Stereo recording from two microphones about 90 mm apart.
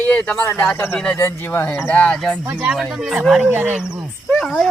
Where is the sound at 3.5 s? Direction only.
15° right (ahead or behind).